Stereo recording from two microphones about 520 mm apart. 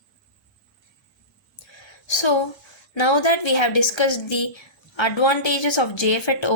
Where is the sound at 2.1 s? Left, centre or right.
Left.